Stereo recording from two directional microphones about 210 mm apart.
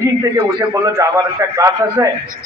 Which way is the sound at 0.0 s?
15° right (ahead or behind).